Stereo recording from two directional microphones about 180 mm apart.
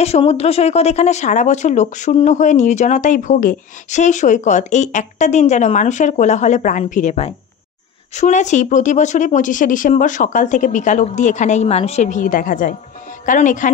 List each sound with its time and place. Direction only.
0.0 s speech: 35° left (ahead or behind)